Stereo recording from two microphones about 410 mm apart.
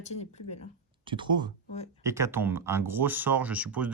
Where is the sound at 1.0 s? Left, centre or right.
Centre.